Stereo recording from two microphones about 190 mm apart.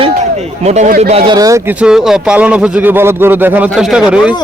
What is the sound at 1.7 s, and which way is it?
A man's voice, 5° right (ahead or behind).